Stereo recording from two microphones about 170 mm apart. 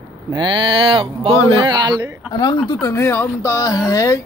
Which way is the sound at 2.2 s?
25° left (ahead or behind).